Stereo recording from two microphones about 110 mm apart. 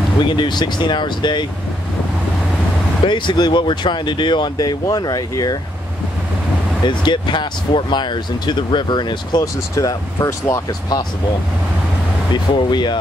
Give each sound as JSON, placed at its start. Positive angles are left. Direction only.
{"t": 0.2, "sound": "speech", "side_deg": 45}
{"t": 3.1, "sound": "speech", "side_deg": 45}
{"t": 6.8, "sound": "speech", "side_deg": 45}
{"t": 12.5, "sound": "speech", "side_deg": 45}